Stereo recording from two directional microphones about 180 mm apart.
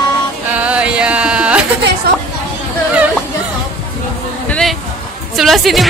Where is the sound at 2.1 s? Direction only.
65° right (ahead or behind).